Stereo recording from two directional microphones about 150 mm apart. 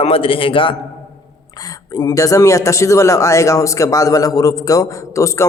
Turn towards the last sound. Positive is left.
turn(degrees=20)  # may be behind; listen again after turning